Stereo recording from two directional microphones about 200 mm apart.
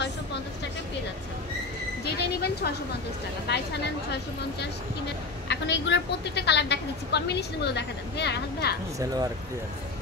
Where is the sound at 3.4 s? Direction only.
55° left (ahead or behind).